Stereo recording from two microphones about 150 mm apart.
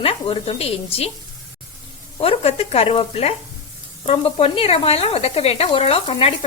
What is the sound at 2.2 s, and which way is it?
Speech, 40° left (ahead or behind).